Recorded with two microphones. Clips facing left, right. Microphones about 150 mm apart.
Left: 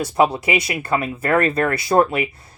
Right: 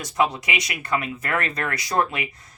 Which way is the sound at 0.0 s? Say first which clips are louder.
Left 6 dB; 30° left (ahead or behind).